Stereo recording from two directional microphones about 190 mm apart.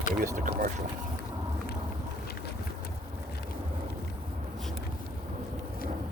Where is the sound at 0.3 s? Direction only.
45° right (ahead or behind).